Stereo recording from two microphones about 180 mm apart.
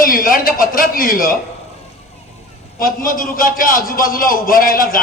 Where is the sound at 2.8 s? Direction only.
50° left (ahead or behind).